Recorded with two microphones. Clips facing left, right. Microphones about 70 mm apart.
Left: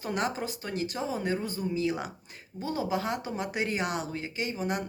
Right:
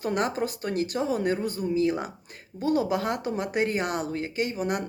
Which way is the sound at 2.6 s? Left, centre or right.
Right.